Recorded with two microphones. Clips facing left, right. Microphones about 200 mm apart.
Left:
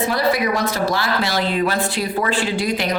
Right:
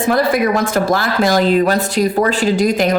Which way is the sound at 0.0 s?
50° right (ahead or behind).